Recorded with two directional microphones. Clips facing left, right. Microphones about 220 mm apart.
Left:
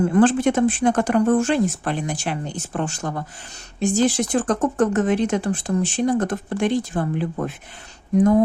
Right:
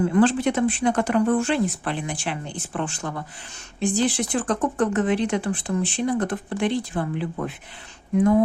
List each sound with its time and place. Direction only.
0.0 s speech: 45° left (ahead or behind)